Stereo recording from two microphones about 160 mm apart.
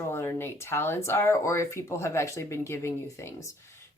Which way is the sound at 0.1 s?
15° left (ahead or behind).